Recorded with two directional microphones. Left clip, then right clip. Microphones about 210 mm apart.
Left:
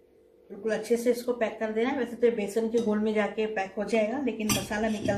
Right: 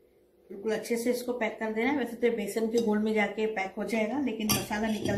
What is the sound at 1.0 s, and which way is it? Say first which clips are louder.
Speech: left 3 dB; 20° left (ahead or behind).